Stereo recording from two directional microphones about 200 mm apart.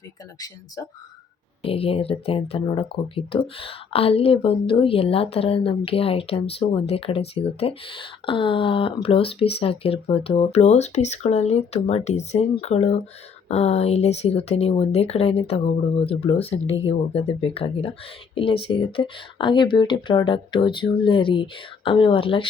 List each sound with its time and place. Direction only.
0.3 s speech: 20° left (ahead or behind)
1.6 s speech: 30° left (ahead or behind)